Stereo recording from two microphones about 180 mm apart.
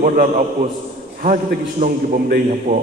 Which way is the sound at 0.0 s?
45° right (ahead or behind).